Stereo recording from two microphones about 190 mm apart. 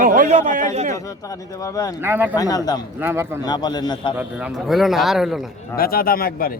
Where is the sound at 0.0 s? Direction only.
45° right (ahead or behind).